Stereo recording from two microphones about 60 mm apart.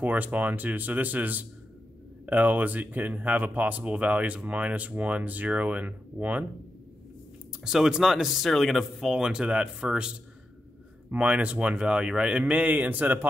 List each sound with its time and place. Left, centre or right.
0.0 s speech: right
7.6 s speech: centre
9.1 s speech: centre
11.1 s speech: right